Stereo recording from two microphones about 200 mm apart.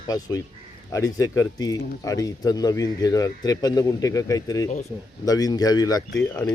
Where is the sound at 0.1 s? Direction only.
20° left (ahead or behind).